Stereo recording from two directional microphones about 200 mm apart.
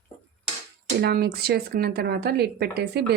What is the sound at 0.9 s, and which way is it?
A woman's voice, 50° right (ahead or behind).